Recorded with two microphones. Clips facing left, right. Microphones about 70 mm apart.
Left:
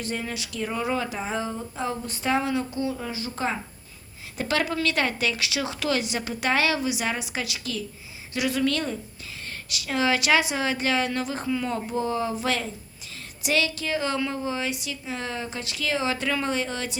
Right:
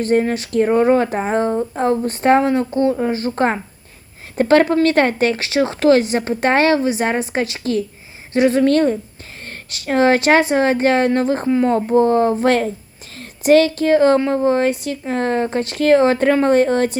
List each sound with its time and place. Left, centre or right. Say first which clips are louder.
0.0 s speech: right 15 dB; right